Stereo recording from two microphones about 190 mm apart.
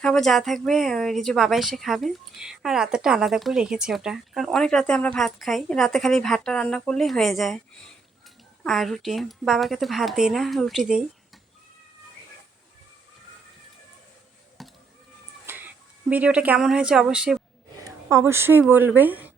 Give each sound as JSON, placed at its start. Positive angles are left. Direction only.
{"t": 0.0, "sound": "speech", "side_deg": 5}
{"t": 8.6, "sound": "speech", "side_deg": 0}
{"t": 14.6, "sound": "a sound", "side_deg": 0}
{"t": 15.5, "sound": "cat", "side_deg": -10}
{"t": 16.0, "sound": "speech", "side_deg": -5}
{"t": 17.8, "sound": "speech", "side_deg": -15}